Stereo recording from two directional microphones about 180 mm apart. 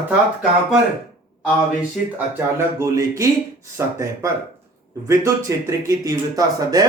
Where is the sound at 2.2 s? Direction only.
15° right (ahead or behind).